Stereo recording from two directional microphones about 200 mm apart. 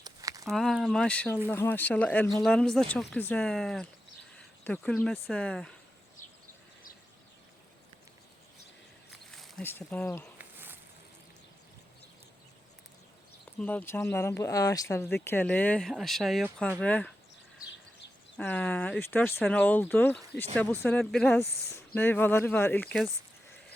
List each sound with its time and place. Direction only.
0.0 s a sound: 15° right (ahead or behind)
0.4 s speech: centre (ahead or behind)
9.3 s speech: 5° left (ahead or behind)
10.3 s snake: 10° right (ahead or behind)
13.6 s speech: 10° left (ahead or behind)
18.3 s speech: 5° left (ahead or behind)